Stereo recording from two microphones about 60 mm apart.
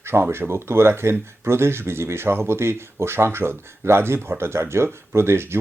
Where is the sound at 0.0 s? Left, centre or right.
Right.